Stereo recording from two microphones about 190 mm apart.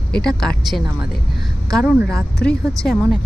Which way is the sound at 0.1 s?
5° left (ahead or behind).